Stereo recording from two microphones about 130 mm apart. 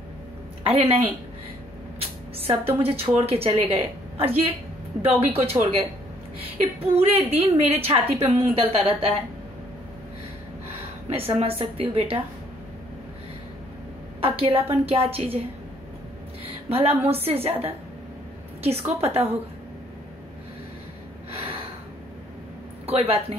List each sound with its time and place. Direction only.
0.7 s a woman's voice: 50° right (ahead or behind)
2.0 s a sound: 50° right (ahead or behind)
2.6 s a woman's voice: 45° right (ahead or behind)
5.3 s a woman's voice: 50° right (ahead or behind)
10.8 s a woman's voice: 50° right (ahead or behind)
14.2 s a woman's voice: 45° right (ahead or behind)
16.4 s a woman's voice: 50° right (ahead or behind)
21.3 s gasp: 45° right (ahead or behind)
22.8 s a woman's voice: 50° right (ahead or behind)